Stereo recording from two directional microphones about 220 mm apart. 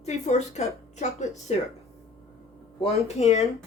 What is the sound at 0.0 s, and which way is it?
A woman's voice, 30° left (ahead or behind).